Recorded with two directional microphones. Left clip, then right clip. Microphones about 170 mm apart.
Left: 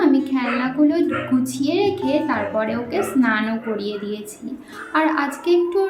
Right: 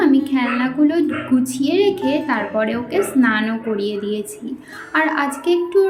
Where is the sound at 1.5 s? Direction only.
15° right (ahead or behind).